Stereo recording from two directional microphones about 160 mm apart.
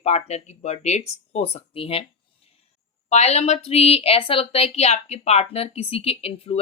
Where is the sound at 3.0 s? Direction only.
45° left (ahead or behind).